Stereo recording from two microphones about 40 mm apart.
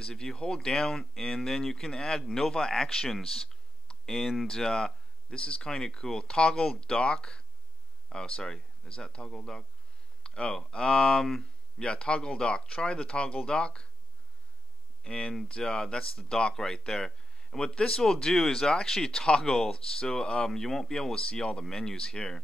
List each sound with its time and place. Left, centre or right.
0.0 s speech: centre
4.5 s speech: centre
11.8 s speech: left
15.0 s speech: left
21.1 s speech: left